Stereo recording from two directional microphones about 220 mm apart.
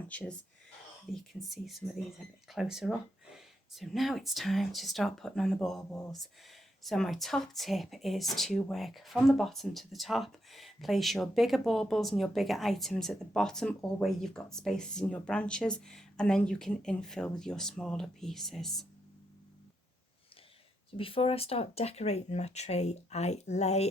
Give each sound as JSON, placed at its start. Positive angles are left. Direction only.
{"t": 0.1, "sound": "speech", "side_deg": 5}
{"t": 20.9, "sound": "speech", "side_deg": 25}